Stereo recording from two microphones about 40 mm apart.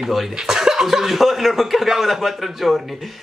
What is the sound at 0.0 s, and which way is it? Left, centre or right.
Speech, centre.